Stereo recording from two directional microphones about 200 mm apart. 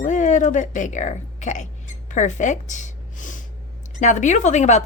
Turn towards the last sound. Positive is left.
turn(degrees=35)  # may be behind; listen again after turning